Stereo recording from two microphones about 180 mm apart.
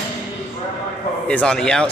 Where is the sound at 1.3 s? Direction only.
5° left (ahead or behind).